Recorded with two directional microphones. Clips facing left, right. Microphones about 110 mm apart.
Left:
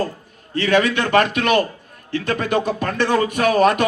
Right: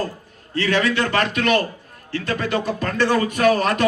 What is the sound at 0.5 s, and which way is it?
A man's voice, 20° left (ahead or behind).